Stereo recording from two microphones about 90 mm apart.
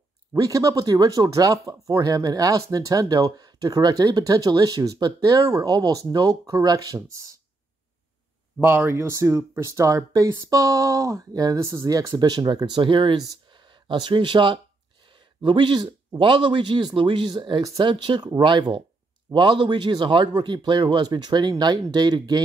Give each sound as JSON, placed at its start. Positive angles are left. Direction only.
{"t": 0.3, "sound": "speech", "side_deg": -40}
{"t": 8.5, "sound": "speech", "side_deg": -25}
{"t": 12.1, "sound": "speech", "side_deg": -55}
{"t": 12.8, "sound": "a man's voice", "side_deg": -65}
{"t": 17.6, "sound": "speech", "side_deg": -40}
{"t": 17.8, "sound": "a man's voice", "side_deg": -65}
{"t": 19.3, "sound": "a man's voice", "side_deg": -60}